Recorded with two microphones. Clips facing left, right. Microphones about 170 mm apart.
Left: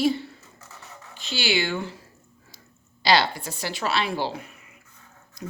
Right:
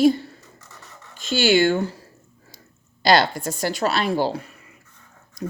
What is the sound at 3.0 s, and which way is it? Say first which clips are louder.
A woman's voice: right 4 dB; 45° right (ahead or behind).